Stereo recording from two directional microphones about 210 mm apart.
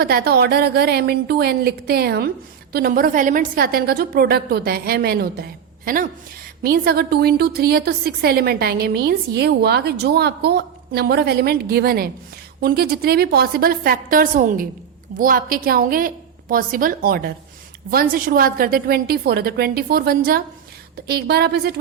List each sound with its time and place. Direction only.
0.0 s a woman's voice: 45° right (ahead or behind)